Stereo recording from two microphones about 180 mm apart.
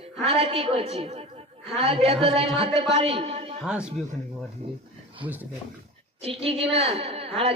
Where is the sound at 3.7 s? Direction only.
5° right (ahead or behind).